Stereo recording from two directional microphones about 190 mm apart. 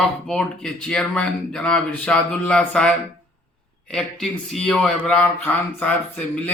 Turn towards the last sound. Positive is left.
turn(degrees=10)  # may be behind; listen again after turning